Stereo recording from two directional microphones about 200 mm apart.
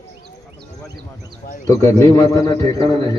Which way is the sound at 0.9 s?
55° right (ahead or behind).